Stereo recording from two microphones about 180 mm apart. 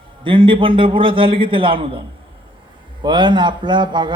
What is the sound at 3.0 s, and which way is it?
A man's voice, 25° right (ahead or behind).